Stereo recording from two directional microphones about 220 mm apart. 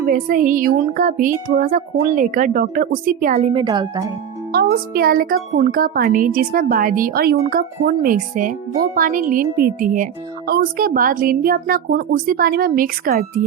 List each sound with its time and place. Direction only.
0.0 s a woman's voice: 40° right (ahead or behind); by 4.1 s 20° right (ahead or behind)
4.5 s a woman's voice: 40° right (ahead or behind)